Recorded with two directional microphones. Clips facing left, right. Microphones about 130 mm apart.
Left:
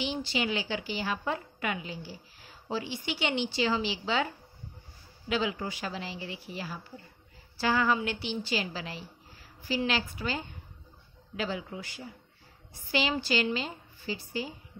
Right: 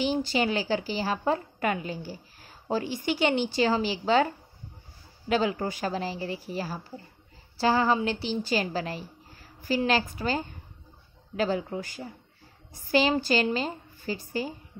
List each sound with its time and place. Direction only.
0.0 s a woman's voice: 45° right (ahead or behind)